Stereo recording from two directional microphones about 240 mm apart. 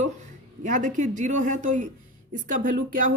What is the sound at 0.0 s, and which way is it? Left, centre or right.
Speech, right.